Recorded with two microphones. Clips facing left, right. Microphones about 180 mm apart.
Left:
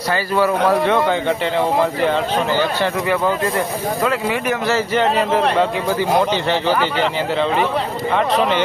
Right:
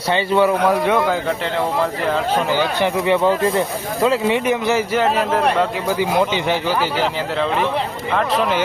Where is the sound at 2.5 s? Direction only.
15° right (ahead or behind).